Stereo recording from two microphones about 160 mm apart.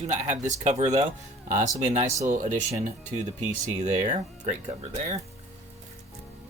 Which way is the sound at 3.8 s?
50° right (ahead or behind).